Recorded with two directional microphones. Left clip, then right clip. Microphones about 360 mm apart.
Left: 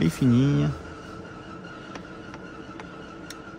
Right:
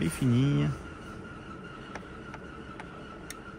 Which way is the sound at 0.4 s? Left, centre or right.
Centre.